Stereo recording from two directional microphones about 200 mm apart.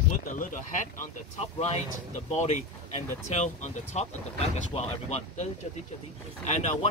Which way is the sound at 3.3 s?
35° left (ahead or behind).